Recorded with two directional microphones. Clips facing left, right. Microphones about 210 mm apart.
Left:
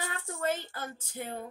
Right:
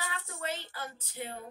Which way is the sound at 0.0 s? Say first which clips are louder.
Left 5 dB; 50° left (ahead or behind).